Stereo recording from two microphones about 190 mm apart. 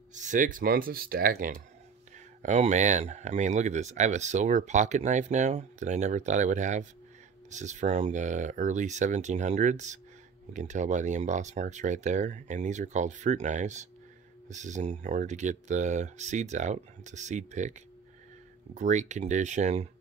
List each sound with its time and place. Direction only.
0.1 s speech: 40° right (ahead or behind)
18.8 s speech: 40° right (ahead or behind)